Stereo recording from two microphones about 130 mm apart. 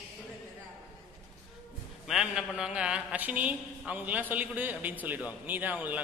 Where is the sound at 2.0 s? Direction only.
5° right (ahead or behind).